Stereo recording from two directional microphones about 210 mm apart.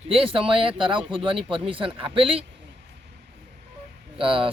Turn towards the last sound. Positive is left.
turn(degrees=-25)  # may be behind; listen again after turning